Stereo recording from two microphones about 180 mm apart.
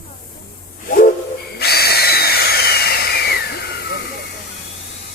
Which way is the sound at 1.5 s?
60° left (ahead or behind).